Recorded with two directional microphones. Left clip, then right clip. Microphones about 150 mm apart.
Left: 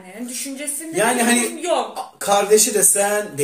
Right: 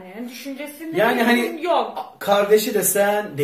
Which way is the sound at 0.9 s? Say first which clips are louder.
Even; 20° left (ahead or behind).